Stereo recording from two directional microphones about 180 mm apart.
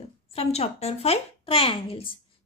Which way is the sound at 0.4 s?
35° left (ahead or behind).